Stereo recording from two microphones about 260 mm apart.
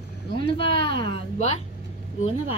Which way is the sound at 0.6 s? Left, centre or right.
Centre.